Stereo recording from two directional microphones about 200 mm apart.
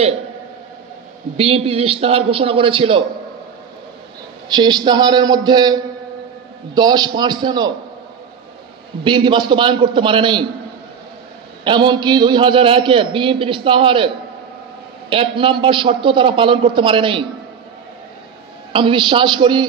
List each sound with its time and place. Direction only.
1.3 s a man's voice: 30° right (ahead or behind)
4.5 s a man's voice: 20° right (ahead or behind)
9.0 s a man's voice: 25° right (ahead or behind)
11.6 s a man's voice: 20° right (ahead or behind)
18.7 s a man's voice: 25° right (ahead or behind)